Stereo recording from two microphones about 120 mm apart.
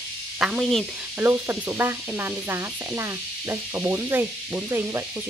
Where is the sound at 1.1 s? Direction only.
15° right (ahead or behind).